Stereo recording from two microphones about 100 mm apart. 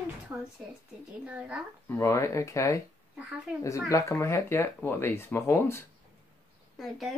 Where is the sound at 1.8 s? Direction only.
30° left (ahead or behind).